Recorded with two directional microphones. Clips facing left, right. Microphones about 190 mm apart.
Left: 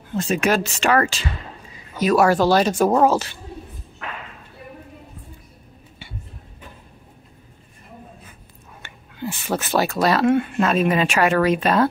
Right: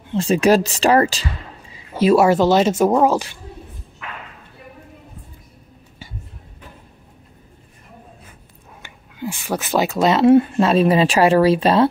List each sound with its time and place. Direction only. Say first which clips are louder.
0.1 s speech: right 5 dB; 30° right (ahead or behind)
8.8 s speech: right 1 dB; 10° right (ahead or behind)
10.3 s speech: right 6 dB; 35° right (ahead or behind)